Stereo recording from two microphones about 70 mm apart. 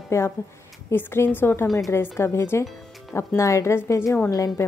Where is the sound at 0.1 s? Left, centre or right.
Left.